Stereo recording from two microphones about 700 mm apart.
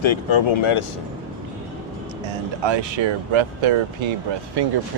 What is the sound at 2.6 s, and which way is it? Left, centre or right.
Speech, right.